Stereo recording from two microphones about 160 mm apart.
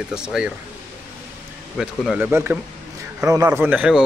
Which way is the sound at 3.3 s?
15° right (ahead or behind).